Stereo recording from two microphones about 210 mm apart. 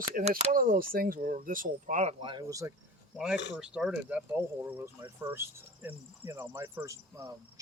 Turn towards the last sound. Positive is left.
turn(degrees=-15)  # may be behind; listen again after turning